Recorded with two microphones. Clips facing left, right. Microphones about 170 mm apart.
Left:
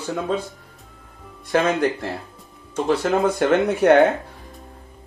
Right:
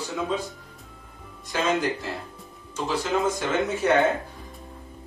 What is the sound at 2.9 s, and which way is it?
Speech, 60° left (ahead or behind).